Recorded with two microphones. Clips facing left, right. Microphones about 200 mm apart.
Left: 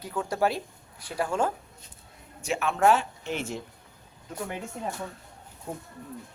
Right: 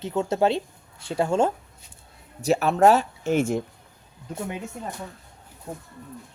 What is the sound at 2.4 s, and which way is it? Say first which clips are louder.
Speech: right 6 dB; 40° right (ahead or behind).